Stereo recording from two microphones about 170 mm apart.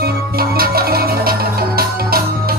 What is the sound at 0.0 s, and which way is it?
Music, 60° right (ahead or behind).